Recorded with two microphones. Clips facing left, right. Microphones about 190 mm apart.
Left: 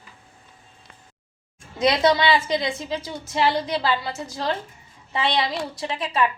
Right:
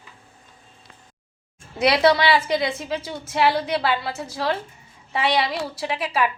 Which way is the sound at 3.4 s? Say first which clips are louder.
Right 2 dB; 5° right (ahead or behind).